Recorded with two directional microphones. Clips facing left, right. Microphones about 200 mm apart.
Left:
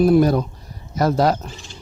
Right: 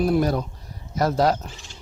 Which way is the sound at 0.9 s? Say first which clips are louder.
Left 3 dB; 65° left (ahead or behind).